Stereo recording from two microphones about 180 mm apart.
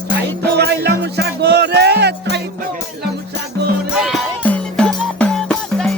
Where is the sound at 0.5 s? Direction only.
65° right (ahead or behind).